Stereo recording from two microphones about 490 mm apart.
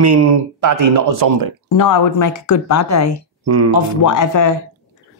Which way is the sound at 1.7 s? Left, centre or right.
Left.